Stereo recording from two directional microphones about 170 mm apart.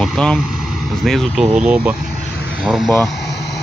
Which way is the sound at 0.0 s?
5° left (ahead or behind).